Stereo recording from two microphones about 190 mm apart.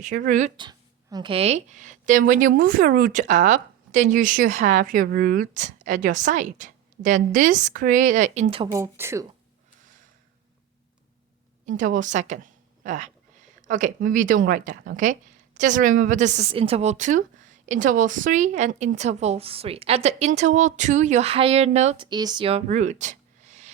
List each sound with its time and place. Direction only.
0.3 s a woman's voice: 40° right (ahead or behind)
0.5 s a woman's voice: 20° right (ahead or behind)
8.7 s speech: 15° right (ahead or behind)
11.8 s a woman's voice: 40° right (ahead or behind)